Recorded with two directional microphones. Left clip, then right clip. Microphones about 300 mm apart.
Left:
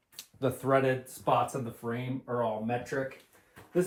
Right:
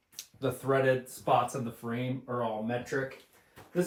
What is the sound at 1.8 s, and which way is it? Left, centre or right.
Speech, centre.